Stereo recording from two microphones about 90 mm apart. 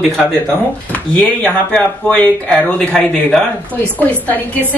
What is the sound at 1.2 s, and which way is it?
A woman's voice, 10° left (ahead or behind).